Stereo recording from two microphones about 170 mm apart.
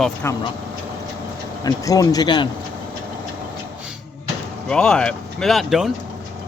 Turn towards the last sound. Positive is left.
turn(degrees=0)  # may be behind; listen again after turning